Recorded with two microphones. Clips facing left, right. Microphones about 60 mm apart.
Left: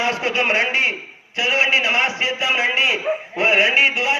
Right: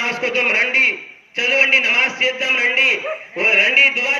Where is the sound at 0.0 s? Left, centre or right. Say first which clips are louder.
Right 1 dB; right.